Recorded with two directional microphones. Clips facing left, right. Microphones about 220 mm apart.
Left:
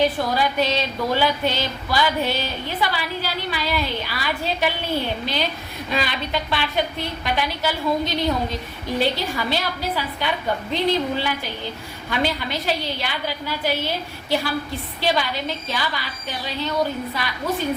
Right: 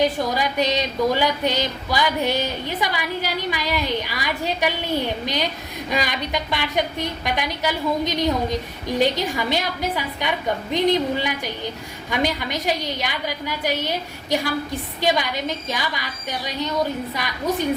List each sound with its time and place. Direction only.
0.0 s speech: 15° right (ahead or behind)